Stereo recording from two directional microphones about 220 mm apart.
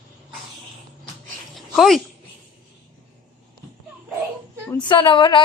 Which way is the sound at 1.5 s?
Centre (ahead or behind).